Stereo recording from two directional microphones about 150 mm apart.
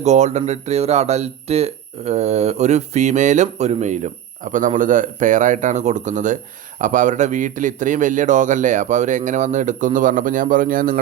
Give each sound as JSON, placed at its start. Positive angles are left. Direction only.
{"t": 0.0, "sound": "speech", "side_deg": -50}